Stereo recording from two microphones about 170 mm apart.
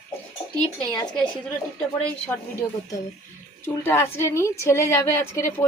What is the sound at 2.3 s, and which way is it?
Speech, 15° left (ahead or behind).